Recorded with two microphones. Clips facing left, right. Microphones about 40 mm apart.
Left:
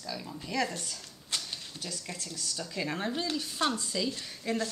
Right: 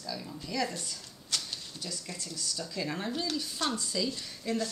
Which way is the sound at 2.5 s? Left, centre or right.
Left.